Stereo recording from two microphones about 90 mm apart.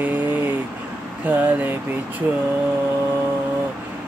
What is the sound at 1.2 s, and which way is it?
Mantra, 20° right (ahead or behind).